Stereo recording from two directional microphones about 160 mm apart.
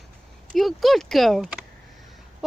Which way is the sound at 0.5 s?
Centre (ahead or behind).